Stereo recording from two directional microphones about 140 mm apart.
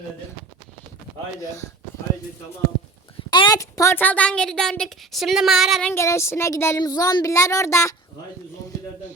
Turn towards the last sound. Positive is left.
turn(degrees=20)  # may be behind; listen again after turning